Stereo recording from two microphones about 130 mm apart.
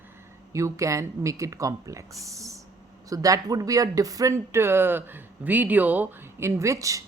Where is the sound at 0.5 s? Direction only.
25° right (ahead or behind).